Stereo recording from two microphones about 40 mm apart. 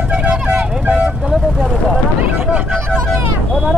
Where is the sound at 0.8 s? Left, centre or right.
Right.